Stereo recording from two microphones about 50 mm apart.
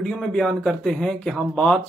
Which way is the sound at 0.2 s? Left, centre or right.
Centre.